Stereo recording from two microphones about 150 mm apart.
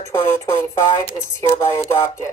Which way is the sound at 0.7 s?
20° left (ahead or behind).